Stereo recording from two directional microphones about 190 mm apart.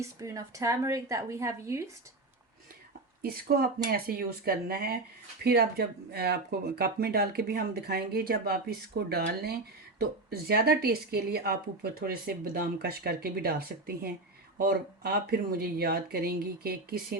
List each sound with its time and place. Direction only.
0.0 s a woman's voice: 15° right (ahead or behind)
3.2 s speech: 50° right (ahead or behind)